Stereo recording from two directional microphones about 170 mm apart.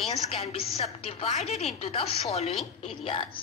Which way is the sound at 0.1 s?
40° left (ahead or behind).